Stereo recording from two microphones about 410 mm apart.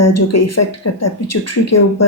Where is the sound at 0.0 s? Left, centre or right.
Left.